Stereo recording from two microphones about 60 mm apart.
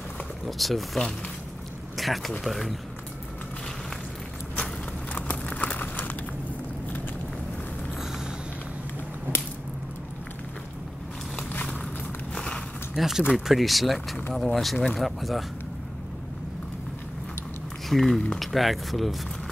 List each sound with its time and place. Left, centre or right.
0.5 s speech: centre
5.1 s crumpling: left
12.4 s a sound: centre
12.9 s speech: centre
17.8 s speech: centre